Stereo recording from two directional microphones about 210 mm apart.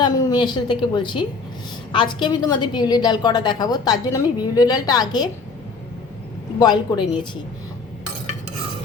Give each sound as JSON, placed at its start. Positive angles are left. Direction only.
{"t": 0.0, "sound": "a woman's voice", "side_deg": 20}
{"t": 6.6, "sound": "a woman's voice", "side_deg": 20}